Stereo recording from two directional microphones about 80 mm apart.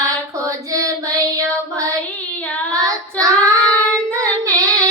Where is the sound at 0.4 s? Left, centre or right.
Right.